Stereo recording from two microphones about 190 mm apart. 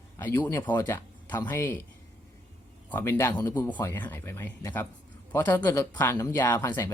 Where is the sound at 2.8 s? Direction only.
10° left (ahead or behind).